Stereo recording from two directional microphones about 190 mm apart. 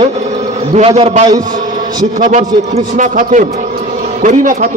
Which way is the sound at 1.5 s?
45° right (ahead or behind).